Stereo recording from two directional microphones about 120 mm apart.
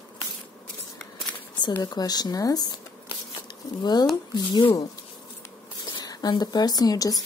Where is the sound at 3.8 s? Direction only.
35° left (ahead or behind).